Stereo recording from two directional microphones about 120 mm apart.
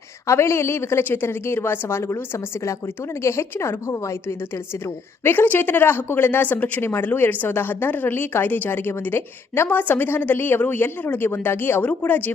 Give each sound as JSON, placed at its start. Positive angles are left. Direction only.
{"t": 0.3, "sound": "a woman's voice", "side_deg": 25}